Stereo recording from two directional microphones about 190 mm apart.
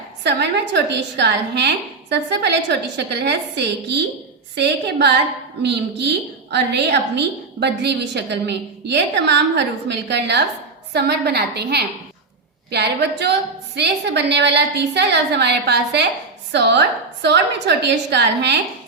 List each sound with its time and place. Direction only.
0.2 s a woman's voice: 60° right (ahead or behind)
6.5 s a woman's voice: 65° right (ahead or behind)